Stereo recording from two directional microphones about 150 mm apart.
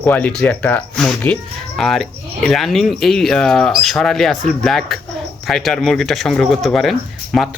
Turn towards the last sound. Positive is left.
turn(degrees=0)  # may be behind; listen again after turning